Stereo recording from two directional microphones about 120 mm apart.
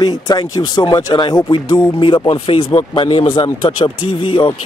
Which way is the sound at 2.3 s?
50° left (ahead or behind).